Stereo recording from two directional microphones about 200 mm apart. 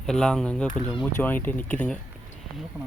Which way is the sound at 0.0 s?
5° left (ahead or behind).